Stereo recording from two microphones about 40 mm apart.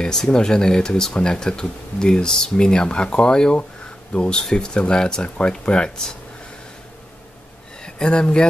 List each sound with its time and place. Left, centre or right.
0.0 s speech: centre
7.8 s speech: left